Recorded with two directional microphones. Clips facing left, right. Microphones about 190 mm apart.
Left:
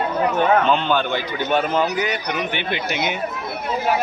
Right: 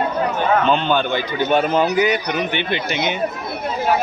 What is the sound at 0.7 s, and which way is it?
A man's voice, 5° left (ahead or behind).